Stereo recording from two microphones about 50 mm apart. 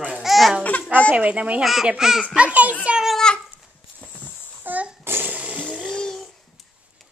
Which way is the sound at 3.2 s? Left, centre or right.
Centre.